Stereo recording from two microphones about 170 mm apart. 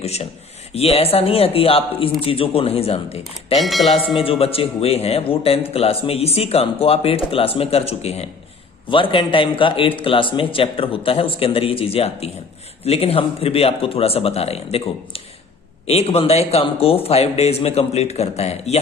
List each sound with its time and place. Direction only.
0.0 s speech: 40° left (ahead or behind)
3.5 s speech: centre (ahead or behind)
4.1 s speech: 35° left (ahead or behind)